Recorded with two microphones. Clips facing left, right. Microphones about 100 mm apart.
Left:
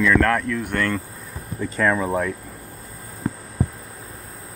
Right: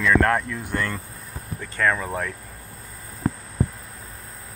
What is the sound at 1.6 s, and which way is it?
Speech, 10° left (ahead or behind).